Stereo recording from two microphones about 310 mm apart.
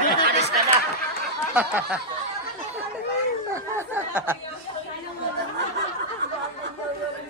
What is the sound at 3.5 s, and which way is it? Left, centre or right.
Speech, centre.